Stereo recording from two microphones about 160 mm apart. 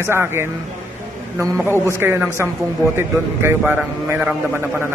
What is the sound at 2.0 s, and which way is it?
A man's voice, 15° right (ahead or behind).